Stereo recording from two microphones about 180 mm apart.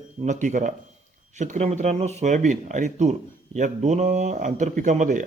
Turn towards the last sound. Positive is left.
turn(degrees=-45)  # may be behind; listen again after turning